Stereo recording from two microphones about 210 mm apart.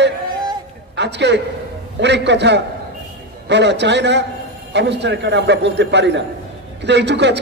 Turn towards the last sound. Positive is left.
turn(degrees=-55)  # may be behind; listen again after turning